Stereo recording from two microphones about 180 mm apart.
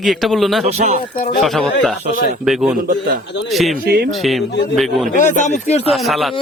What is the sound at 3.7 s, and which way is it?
Speech, 60° right (ahead or behind).